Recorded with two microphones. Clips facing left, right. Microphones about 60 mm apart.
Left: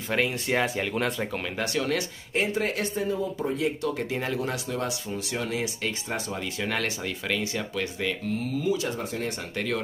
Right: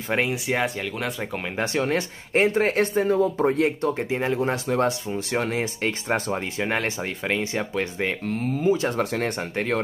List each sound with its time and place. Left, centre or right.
0.1 s speech: centre
1.6 s speech: right
3.8 s speech: right
4.6 s speech: right
6.6 s speech: right
8.9 s speech: right